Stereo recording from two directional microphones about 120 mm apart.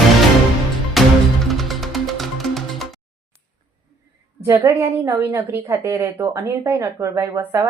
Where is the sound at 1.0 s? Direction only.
Centre (ahead or behind).